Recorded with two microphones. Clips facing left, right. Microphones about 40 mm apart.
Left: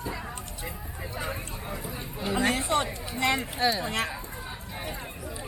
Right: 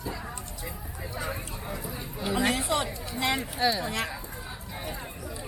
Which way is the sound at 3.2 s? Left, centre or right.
Left.